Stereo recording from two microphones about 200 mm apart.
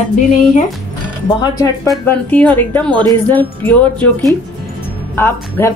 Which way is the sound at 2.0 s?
10° left (ahead or behind).